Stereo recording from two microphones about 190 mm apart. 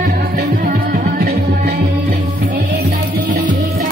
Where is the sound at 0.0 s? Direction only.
50° right (ahead or behind).